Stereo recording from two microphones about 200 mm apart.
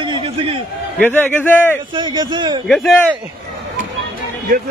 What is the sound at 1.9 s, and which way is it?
Speech, 20° right (ahead or behind).